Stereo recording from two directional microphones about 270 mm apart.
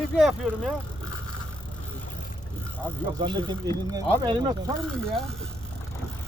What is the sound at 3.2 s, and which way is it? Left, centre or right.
Speech, centre.